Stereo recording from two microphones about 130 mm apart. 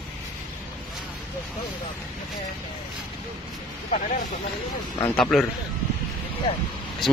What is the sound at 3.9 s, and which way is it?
Speech, 90° left.